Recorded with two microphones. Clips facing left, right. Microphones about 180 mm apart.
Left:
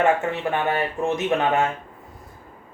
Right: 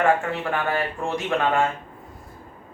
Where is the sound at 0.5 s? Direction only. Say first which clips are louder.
Even; 20° left (ahead or behind).